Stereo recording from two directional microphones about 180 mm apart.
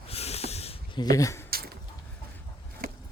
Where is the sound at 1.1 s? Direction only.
15° left (ahead or behind).